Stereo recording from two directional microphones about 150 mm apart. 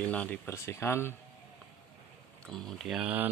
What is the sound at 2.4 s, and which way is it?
Speech, 5° left (ahead or behind).